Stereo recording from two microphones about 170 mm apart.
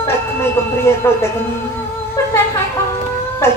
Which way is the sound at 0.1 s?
15° left (ahead or behind).